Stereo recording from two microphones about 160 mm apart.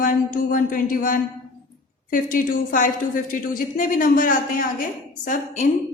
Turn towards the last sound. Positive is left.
turn(degrees=45)  # may be behind; listen again after turning